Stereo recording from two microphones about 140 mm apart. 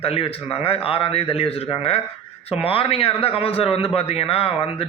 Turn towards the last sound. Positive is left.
turn(degrees=40)  # may be behind; listen again after turning